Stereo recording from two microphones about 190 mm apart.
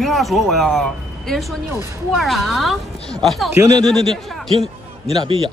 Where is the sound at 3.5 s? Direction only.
15° right (ahead or behind).